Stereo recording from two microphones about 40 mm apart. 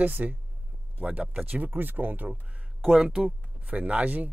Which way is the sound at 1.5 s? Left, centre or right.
Right.